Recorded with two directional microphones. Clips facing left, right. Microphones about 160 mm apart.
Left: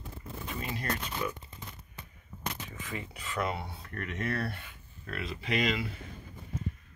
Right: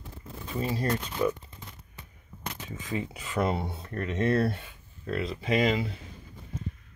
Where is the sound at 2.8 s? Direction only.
20° right (ahead or behind).